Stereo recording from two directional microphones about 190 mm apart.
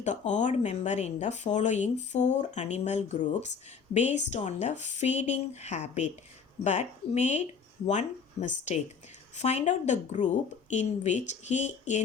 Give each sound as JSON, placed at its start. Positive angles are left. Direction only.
{"t": 0.0, "sound": "speech", "side_deg": 40}